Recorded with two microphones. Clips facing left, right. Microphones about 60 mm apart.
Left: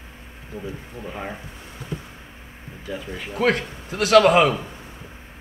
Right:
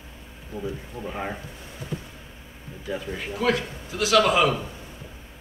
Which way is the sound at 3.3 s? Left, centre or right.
Left.